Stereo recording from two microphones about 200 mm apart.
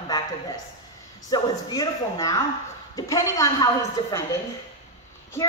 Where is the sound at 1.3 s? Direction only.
20° left (ahead or behind).